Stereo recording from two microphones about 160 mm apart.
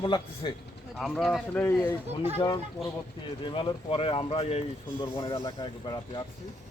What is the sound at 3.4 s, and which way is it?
Speech, 30° left (ahead or behind).